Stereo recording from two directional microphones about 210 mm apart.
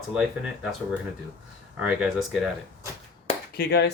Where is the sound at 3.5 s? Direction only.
50° left (ahead or behind).